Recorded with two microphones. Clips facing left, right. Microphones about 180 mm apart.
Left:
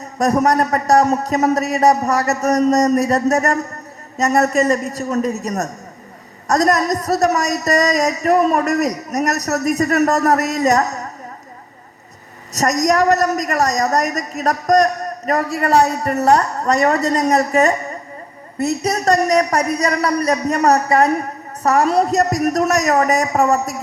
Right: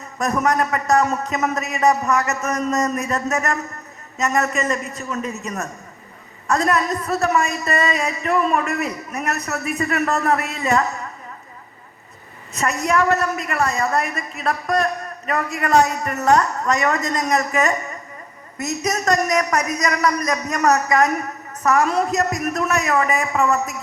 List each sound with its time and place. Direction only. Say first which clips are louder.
0.0 s a woman's voice: left 5 dB; 35° left (ahead or behind)
12.5 s a woman's voice: left 4 dB; 40° left (ahead or behind)